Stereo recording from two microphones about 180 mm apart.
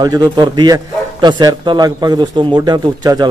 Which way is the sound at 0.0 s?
20° right (ahead or behind).